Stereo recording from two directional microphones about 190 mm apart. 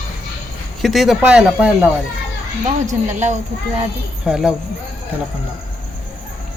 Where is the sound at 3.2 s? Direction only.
40° right (ahead or behind).